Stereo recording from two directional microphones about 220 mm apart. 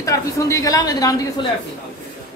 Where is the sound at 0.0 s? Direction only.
15° left (ahead or behind).